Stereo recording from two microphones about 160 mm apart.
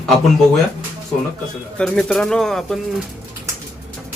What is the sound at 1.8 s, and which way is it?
Speech, 5° left (ahead or behind).